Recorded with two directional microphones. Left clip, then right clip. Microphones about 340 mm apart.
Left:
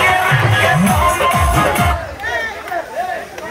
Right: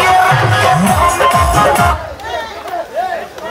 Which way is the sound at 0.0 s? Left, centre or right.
Centre.